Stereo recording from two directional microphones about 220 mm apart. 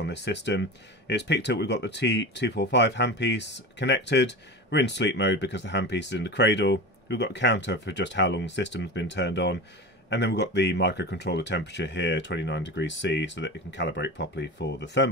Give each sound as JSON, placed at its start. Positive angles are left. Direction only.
{"t": 0.0, "sound": "speech", "side_deg": 50}